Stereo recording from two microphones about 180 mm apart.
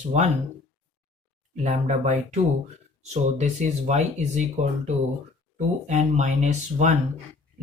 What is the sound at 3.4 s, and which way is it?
Speech, 40° right (ahead or behind).